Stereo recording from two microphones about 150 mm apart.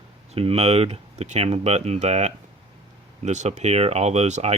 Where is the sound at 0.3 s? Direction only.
40° right (ahead or behind).